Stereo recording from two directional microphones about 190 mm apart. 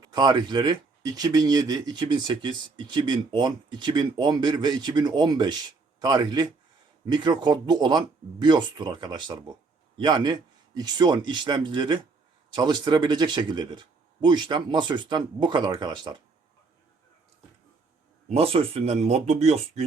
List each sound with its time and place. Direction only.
0.0 s speech: 20° right (ahead or behind)
18.3 s speech: 30° right (ahead or behind)